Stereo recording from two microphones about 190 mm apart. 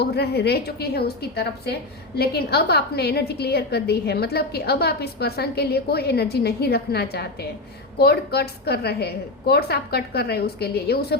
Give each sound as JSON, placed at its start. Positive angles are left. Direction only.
{"t": 0.0, "sound": "a woman's voice", "side_deg": 60}